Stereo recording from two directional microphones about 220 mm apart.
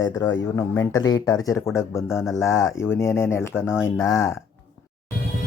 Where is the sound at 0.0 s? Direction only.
10° left (ahead or behind).